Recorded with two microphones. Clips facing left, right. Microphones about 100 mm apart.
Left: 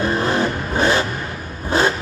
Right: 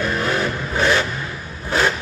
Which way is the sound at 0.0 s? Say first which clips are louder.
Left 2 dB; 30° left (ahead or behind).